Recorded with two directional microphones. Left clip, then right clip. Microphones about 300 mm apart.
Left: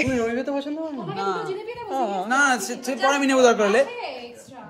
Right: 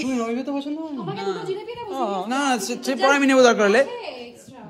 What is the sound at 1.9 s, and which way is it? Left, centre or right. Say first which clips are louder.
Speech: left 2 dB; centre.